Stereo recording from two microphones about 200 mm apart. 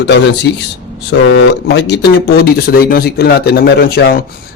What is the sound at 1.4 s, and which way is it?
A man's voice, 60° left (ahead or behind).